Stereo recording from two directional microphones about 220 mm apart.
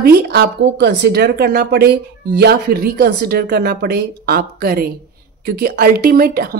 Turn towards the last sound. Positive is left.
turn(degrees=-45)  # may be behind; listen again after turning